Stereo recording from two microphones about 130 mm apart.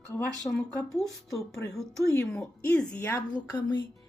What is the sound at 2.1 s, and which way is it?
Speech, 25° left (ahead or behind).